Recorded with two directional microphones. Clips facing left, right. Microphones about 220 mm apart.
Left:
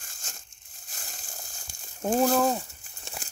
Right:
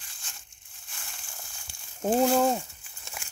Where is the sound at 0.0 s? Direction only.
45° left (ahead or behind).